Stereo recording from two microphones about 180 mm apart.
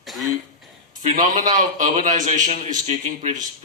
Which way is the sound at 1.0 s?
45° right (ahead or behind).